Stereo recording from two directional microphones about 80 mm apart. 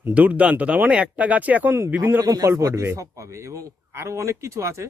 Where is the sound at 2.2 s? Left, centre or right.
Right.